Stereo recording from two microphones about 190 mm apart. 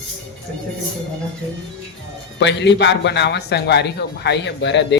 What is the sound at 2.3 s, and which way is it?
A man's voice, 65° left (ahead or behind).